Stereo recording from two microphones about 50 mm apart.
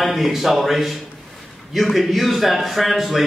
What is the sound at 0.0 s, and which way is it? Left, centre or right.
A man's voice, centre.